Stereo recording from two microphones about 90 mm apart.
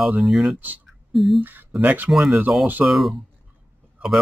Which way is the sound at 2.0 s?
5° right (ahead or behind).